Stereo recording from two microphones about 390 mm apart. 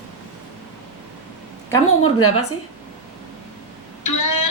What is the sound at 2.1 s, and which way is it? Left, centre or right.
Speech, left.